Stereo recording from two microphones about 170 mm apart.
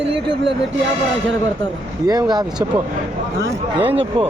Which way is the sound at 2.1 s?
25° right (ahead or behind).